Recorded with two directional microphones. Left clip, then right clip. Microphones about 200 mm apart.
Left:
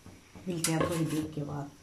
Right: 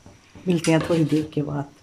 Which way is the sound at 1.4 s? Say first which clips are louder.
Right 12 dB; 55° right (ahead or behind).